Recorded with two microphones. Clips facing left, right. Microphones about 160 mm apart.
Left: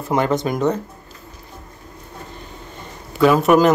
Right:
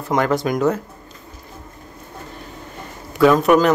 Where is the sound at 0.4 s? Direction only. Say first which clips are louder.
Right 1 dB; centre (ahead or behind).